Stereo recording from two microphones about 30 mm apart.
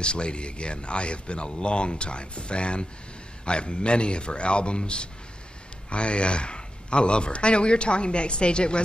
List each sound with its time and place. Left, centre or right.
0.0 s speech: left